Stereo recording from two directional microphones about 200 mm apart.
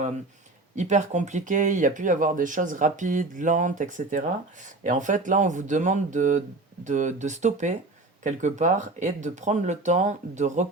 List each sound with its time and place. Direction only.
0.8 s speech: 35° right (ahead or behind)